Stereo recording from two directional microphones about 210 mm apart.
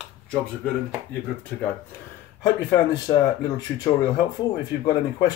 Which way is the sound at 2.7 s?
20° left (ahead or behind).